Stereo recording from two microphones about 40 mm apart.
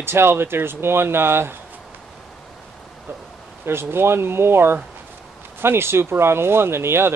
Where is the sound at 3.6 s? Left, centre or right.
Right.